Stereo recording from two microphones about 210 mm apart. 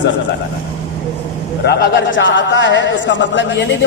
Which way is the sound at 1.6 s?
55° left (ahead or behind).